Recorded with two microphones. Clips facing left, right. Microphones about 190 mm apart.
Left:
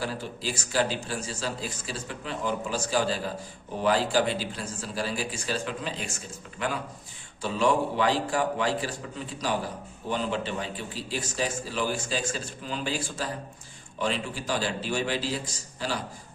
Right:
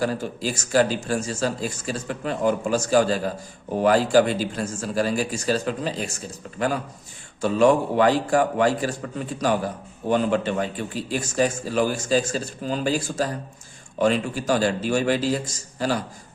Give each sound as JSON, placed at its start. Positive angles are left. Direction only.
{"t": 0.0, "sound": "a man's voice", "side_deg": -45}